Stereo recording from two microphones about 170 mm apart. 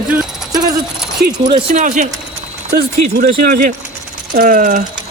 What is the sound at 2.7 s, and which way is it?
Speech, 75° right (ahead or behind).